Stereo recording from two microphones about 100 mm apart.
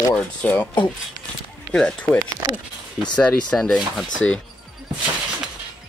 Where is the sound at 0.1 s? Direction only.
15° left (ahead or behind).